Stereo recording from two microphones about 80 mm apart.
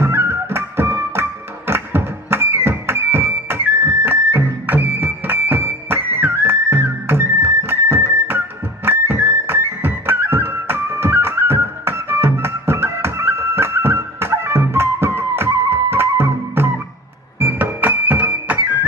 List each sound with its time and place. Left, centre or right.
0.0 s music: right